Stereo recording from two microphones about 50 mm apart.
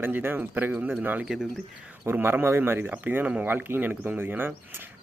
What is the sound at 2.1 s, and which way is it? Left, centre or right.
Speech, right.